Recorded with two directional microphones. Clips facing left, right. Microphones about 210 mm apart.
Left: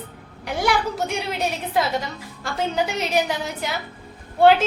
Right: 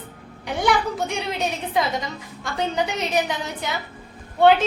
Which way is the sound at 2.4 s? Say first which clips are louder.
Left 1 dB; 5° left (ahead or behind).